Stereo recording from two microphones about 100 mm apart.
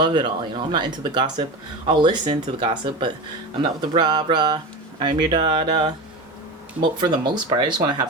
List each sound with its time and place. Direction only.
0.0 s speech: 55° right (ahead or behind)
7.0 s speech: 45° right (ahead or behind)